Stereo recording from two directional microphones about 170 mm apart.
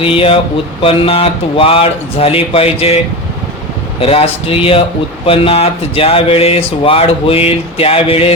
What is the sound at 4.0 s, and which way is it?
Speech, 35° left (ahead or behind).